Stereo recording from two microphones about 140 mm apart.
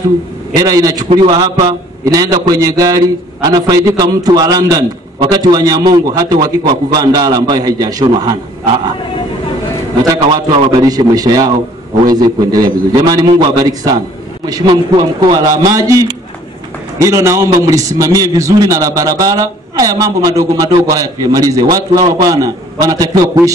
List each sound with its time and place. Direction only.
0.6 s a man's voice: 25° right (ahead or behind)
10.0 s a man's voice: 30° right (ahead or behind)